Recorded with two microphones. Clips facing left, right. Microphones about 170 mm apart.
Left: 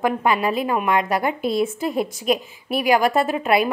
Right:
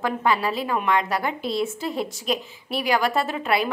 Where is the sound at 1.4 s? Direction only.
50° left (ahead or behind).